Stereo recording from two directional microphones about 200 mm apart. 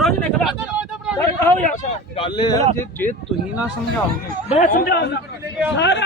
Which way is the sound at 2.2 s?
20° left (ahead or behind).